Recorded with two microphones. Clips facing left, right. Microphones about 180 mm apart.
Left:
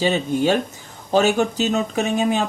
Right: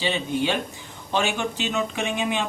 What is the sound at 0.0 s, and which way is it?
Speech, 45° left (ahead or behind).